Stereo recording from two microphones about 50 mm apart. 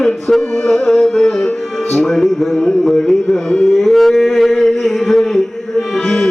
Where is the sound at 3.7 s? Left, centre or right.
Centre.